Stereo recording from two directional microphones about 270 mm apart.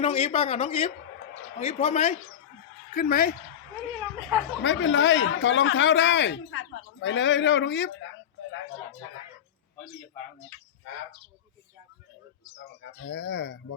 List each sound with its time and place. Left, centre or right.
0.0 s speech: left
4.6 s speech: left
12.5 s speech: left